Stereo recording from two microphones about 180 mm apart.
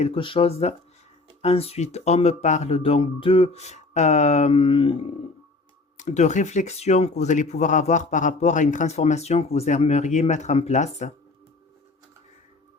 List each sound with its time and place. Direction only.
0.0 s speech: 30° left (ahead or behind)
6.0 s speech: 40° left (ahead or behind)